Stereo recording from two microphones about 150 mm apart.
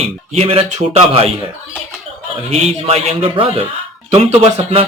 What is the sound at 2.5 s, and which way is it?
Speech, 40° right (ahead or behind).